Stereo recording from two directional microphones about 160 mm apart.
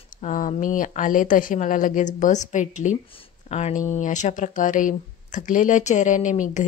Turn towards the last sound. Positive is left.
turn(degrees=50)  # may be behind; listen again after turning